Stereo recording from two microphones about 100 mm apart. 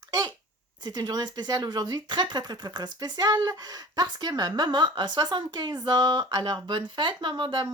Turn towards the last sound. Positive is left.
turn(degrees=-55)  # may be behind; listen again after turning